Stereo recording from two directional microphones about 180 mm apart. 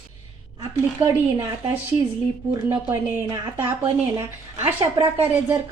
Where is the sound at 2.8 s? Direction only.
10° right (ahead or behind).